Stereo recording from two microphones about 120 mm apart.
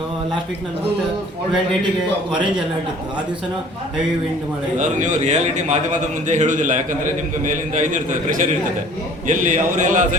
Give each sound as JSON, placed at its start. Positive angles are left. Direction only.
{"t": 4.8, "sound": "a man's voice", "side_deg": -90}